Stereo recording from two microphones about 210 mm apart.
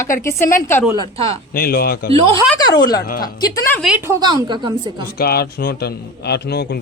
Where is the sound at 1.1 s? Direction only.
25° right (ahead or behind).